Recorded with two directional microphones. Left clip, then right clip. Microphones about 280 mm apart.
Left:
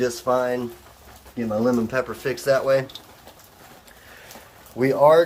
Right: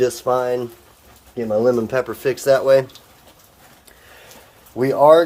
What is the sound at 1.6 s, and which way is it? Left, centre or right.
Speech, right.